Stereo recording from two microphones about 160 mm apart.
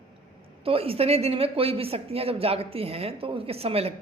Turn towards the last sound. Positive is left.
turn(degrees=-40)  # may be behind; listen again after turning